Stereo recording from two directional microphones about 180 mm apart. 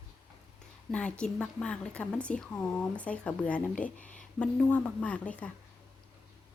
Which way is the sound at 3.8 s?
45° left (ahead or behind).